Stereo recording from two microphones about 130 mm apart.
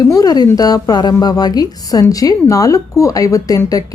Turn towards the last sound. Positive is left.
turn(degrees=25)  # may be behind; listen again after turning